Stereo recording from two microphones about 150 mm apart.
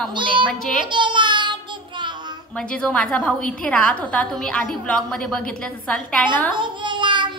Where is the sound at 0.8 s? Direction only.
30° right (ahead or behind).